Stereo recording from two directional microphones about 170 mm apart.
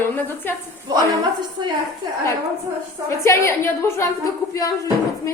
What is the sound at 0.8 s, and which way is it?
Speech, 25° right (ahead or behind).